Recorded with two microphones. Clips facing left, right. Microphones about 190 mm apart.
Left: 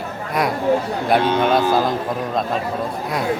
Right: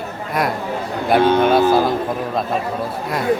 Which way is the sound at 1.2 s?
55° right (ahead or behind).